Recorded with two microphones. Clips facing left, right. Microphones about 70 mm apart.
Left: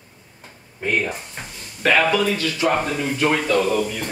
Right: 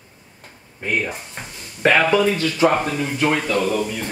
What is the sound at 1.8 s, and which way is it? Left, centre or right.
Speech, right.